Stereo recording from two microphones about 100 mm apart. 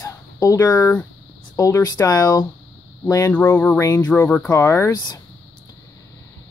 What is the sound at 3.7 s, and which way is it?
Speech, 30° left (ahead or behind).